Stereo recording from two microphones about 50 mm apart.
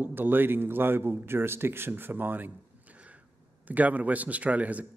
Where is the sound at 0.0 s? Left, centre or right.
Right.